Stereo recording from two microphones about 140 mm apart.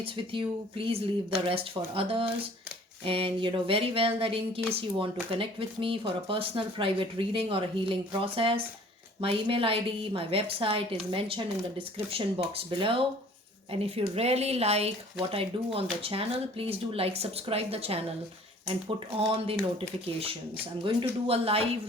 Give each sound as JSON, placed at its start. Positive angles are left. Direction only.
{"t": 0.0, "sound": "speech", "side_deg": -40}
{"t": 20.8, "sound": "speech", "side_deg": -45}